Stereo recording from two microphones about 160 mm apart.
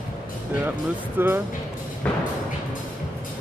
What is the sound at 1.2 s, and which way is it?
Speech, 15° right (ahead or behind).